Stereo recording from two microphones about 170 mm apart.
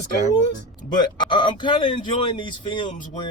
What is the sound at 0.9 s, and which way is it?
Speech, 25° left (ahead or behind).